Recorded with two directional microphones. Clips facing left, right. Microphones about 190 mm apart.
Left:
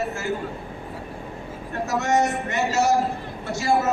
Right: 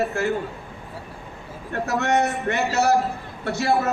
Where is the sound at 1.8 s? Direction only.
60° right (ahead or behind).